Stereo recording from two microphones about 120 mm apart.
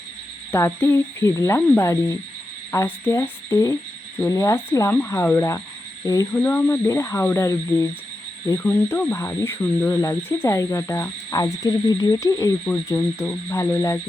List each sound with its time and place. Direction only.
0.5 s speech: 20° left (ahead or behind)